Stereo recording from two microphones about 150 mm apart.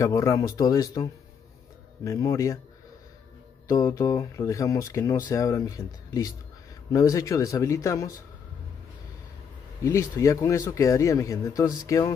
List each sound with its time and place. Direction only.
0.0 s speech: 20° left (ahead or behind)
3.6 s speech: 20° left (ahead or behind)
10.1 s speech: 20° left (ahead or behind)